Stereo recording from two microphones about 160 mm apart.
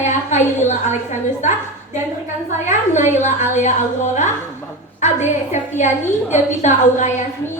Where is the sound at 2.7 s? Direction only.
50° left (ahead or behind).